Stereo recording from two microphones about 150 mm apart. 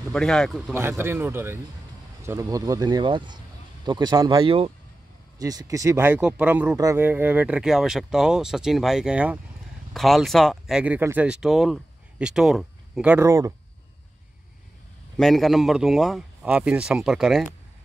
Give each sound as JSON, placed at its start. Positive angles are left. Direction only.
{"t": 0.1, "sound": "speech", "side_deg": 5}
{"t": 0.7, "sound": "speech", "side_deg": -15}
{"t": 4.5, "sound": "speech", "side_deg": -35}
{"t": 5.4, "sound": "speech", "side_deg": -25}
{"t": 6.8, "sound": "speech", "side_deg": -20}
{"t": 7.1, "sound": "speech", "side_deg": -10}
{"t": 13.2, "sound": "speech", "side_deg": -20}
{"t": 15.1, "sound": "speech", "side_deg": 0}